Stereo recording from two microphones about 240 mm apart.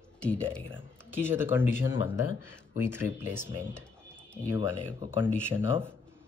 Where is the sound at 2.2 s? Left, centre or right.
Left.